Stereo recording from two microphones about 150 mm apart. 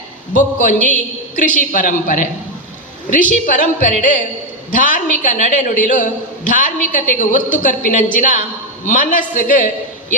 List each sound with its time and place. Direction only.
0.3 s a man's voice: 60° left (ahead or behind)